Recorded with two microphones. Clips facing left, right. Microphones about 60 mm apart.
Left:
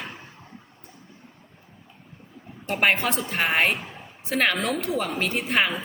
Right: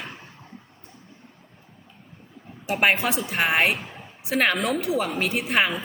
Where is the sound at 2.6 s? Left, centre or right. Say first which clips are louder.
Right 1 dB; centre.